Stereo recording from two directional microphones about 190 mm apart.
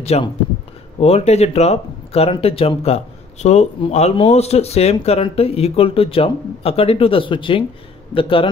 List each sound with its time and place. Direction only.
0.0 s a man's voice: 35° left (ahead or behind)